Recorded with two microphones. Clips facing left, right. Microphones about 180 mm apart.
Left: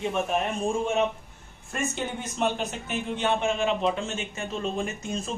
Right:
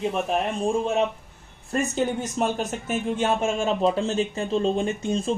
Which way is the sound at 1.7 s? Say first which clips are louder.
Right 6 dB; 35° right (ahead or behind).